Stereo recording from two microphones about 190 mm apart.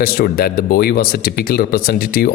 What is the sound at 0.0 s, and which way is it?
Speech, 50° left (ahead or behind).